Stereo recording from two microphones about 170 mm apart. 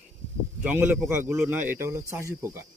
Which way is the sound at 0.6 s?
10° right (ahead or behind).